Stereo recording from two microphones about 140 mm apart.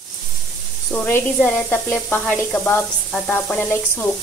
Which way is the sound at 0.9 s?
15° left (ahead or behind).